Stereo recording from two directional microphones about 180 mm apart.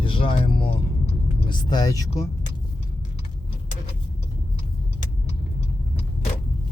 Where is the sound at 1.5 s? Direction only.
20° left (ahead or behind).